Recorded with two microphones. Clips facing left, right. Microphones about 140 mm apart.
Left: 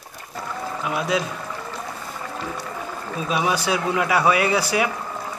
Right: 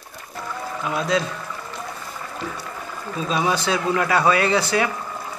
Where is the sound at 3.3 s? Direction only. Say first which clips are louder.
Even; 10° left (ahead or behind).